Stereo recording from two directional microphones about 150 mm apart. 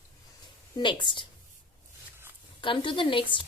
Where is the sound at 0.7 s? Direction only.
30° left (ahead or behind).